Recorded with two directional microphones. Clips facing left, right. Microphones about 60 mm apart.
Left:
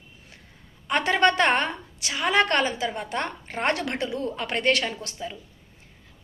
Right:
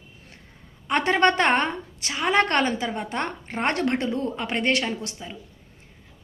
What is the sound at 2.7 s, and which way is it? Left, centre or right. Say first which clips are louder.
A woman's voice: right 1 dB; right.